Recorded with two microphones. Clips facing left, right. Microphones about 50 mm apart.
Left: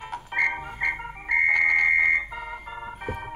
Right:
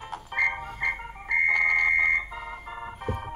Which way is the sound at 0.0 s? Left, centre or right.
Centre.